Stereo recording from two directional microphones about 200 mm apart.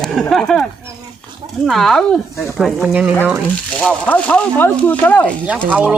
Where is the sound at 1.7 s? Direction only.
Centre (ahead or behind).